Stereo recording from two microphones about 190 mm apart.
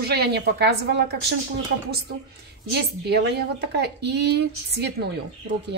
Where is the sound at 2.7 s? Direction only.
60° right (ahead or behind).